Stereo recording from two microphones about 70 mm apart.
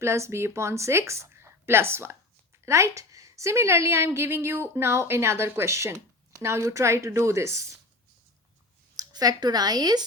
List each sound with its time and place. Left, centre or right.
0.0 s a woman's voice: right
9.0 s speech: right